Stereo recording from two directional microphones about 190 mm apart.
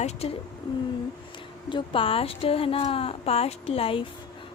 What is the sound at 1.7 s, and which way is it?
A woman's voice, 25° left (ahead or behind).